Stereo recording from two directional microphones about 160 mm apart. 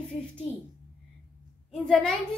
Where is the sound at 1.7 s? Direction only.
5° left (ahead or behind).